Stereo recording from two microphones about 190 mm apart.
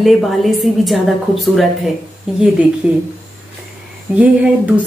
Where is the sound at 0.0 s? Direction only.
Centre (ahead or behind).